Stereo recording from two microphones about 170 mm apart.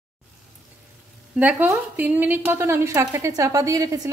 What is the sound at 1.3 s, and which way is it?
A woman's voice, 10° right (ahead or behind).